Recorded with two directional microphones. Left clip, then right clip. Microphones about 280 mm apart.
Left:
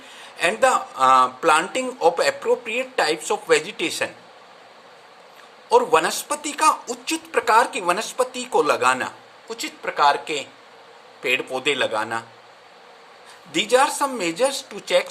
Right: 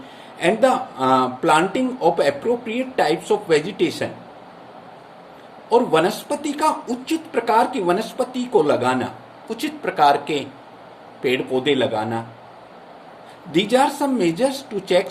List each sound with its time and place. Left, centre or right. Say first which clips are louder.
0.3 s speech: right 1 dB; left
5.6 s speech: even; left
13.5 s speech: right 1 dB; left